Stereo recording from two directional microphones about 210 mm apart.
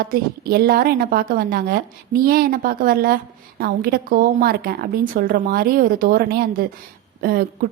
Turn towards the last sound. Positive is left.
turn(degrees=-45)  # may be behind; listen again after turning